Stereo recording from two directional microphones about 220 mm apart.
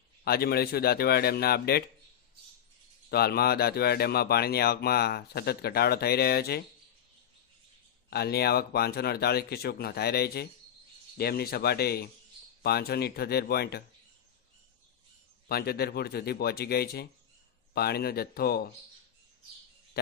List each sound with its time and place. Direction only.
0.3 s speech: 45° left (ahead or behind)
3.1 s speech: 45° left (ahead or behind)
8.1 s speech: 45° left (ahead or behind)
15.4 s speech: 45° left (ahead or behind)